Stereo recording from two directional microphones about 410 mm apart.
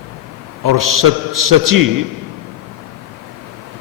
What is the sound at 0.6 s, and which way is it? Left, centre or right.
A man's voice, right.